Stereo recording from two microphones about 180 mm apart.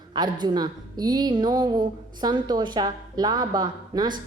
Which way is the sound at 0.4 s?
20° right (ahead or behind).